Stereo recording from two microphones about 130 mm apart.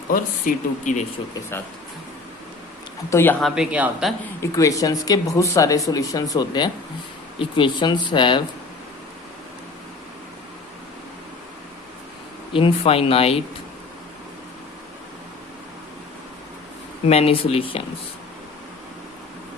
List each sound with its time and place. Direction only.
0.1 s speech: 80° left
3.1 s speech: 20° left (ahead or behind)
3.4 s speech: 5° right (ahead or behind)
4.4 s speech: 25° left (ahead or behind)
12.5 s speech: 45° left (ahead or behind)
17.1 s speech: 50° left (ahead or behind)